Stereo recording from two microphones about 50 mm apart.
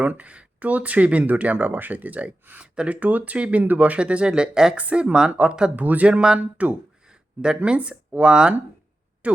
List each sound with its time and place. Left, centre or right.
0.0 s speech: right
3.3 s speech: right
3.6 s speech: right
5.7 s speech: right
6.1 s speech: centre
6.4 s speech: right
7.1 s speech: centre